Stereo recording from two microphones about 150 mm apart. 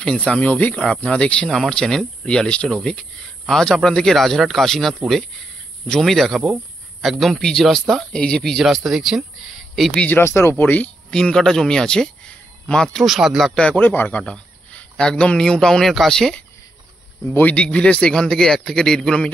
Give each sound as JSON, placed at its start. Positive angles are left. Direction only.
{"t": 0.0, "sound": "speech", "side_deg": 5}
{"t": 10.0, "sound": "speech", "side_deg": 15}